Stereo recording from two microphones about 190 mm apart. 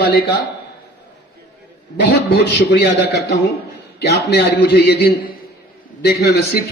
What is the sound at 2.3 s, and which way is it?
A man's voice, 60° left (ahead or behind).